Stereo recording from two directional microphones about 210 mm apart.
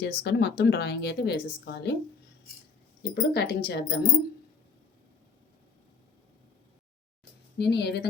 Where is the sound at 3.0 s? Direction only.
50° left (ahead or behind).